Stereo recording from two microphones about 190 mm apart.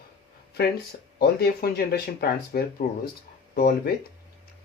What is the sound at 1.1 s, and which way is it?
Speech, 55° left (ahead or behind).